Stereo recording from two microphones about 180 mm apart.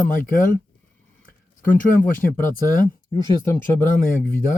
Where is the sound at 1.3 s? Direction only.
50° left (ahead or behind).